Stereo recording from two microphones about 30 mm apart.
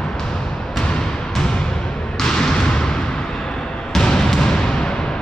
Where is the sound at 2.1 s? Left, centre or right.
Left.